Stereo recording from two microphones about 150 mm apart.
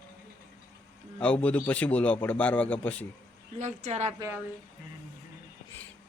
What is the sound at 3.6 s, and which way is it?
Speech, 50° right (ahead or behind).